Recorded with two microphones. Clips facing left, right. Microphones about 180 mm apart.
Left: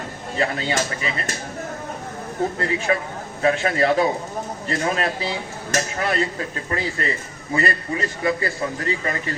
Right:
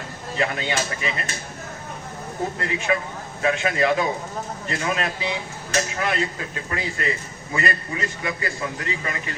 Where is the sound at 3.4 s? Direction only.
35° left (ahead or behind).